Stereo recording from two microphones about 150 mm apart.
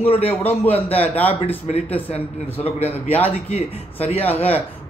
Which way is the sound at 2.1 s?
40° left (ahead or behind).